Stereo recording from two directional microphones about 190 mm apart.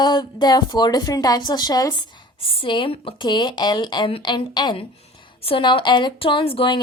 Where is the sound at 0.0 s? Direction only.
20° left (ahead or behind).